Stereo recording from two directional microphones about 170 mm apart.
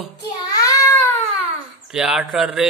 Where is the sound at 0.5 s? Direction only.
20° left (ahead or behind).